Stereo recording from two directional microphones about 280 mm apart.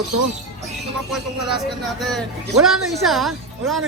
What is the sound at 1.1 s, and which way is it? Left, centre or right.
Speech, centre.